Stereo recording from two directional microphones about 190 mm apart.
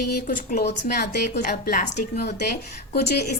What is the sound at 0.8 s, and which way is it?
A woman's voice, 60° left (ahead or behind).